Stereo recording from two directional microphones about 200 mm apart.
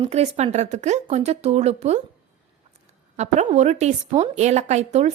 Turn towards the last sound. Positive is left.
turn(degrees=-35)  # may be behind; listen again after turning